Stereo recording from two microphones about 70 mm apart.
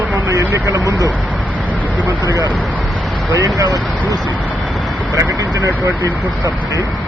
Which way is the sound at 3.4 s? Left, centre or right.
Right.